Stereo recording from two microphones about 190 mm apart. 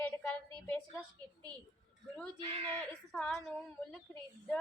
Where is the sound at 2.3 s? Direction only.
30° right (ahead or behind).